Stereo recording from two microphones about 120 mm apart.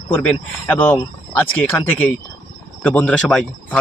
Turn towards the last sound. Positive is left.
turn(degrees=5)  # may be behind; listen again after turning